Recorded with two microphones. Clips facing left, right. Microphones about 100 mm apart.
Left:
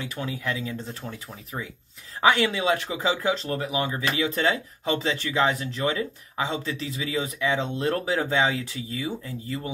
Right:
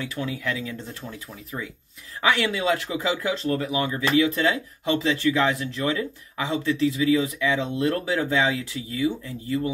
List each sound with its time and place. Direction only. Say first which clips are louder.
0.4 s speech: right 1 dB; 30° left (ahead or behind)
2.2 s speech: left 1 dB; 25° left (ahead or behind)